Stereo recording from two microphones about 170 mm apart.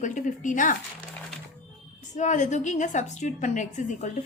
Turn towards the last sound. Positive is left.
turn(degrees=45)  # may be behind; listen again after turning